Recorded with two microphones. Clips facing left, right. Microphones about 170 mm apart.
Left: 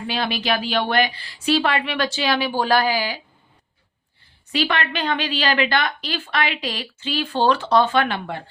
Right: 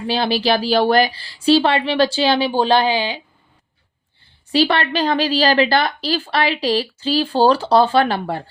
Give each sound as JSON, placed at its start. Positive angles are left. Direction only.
{"t": 0.1, "sound": "a woman's voice", "side_deg": -30}
{"t": 4.5, "sound": "a woman's voice", "side_deg": -35}